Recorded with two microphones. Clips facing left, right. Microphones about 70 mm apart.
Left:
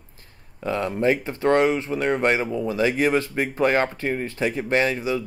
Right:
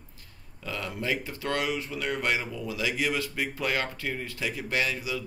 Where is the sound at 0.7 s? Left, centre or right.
Left.